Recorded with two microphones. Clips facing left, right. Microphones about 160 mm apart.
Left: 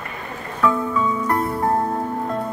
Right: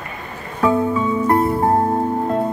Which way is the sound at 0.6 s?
30° right (ahead or behind).